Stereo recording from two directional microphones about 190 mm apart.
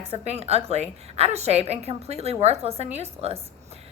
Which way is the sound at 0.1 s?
35° right (ahead or behind).